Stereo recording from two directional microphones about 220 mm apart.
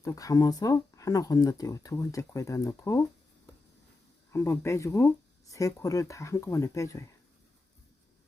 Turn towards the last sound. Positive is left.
turn(degrees=15)  # may be behind; listen again after turning